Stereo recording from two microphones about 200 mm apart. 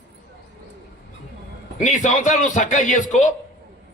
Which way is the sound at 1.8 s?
40° left (ahead or behind).